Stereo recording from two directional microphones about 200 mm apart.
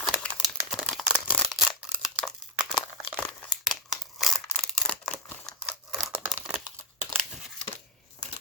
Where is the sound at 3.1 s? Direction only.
5° left (ahead or behind).